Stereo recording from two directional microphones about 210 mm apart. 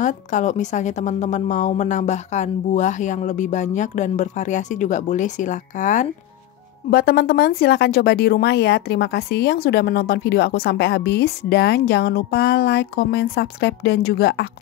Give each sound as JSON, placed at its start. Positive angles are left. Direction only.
{"t": 0.0, "sound": "a woman's voice", "side_deg": 35}